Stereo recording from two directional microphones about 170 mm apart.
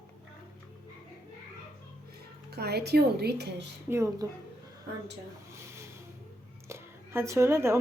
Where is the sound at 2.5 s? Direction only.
70° right (ahead or behind).